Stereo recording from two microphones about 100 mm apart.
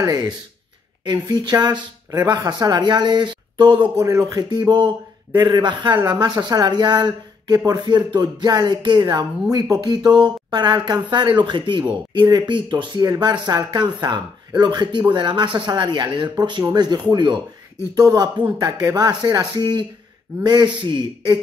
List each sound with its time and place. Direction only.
0.0 s speech: 45° right (ahead or behind)
3.9 s speech: 30° right (ahead or behind); by 17.4 s 50° right (ahead or behind)
17.9 s speech: 40° right (ahead or behind)